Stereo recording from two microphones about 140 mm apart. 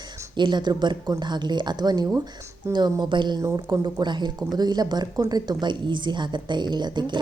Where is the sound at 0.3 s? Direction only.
30° right (ahead or behind).